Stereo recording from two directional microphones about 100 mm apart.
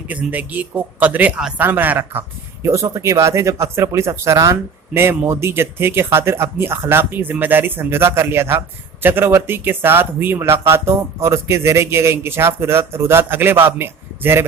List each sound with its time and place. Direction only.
0.1 s speech: 15° right (ahead or behind)
2.6 s speech: 35° right (ahead or behind)